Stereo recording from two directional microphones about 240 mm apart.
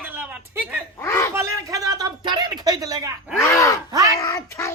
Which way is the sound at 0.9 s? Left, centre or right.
Centre.